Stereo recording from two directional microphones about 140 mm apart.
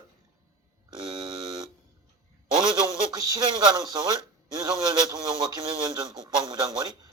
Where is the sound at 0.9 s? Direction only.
40° right (ahead or behind).